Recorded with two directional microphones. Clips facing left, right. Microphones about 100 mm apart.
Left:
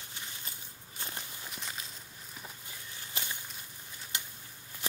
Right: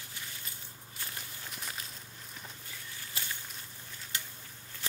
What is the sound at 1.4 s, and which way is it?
Walk, centre (ahead or behind).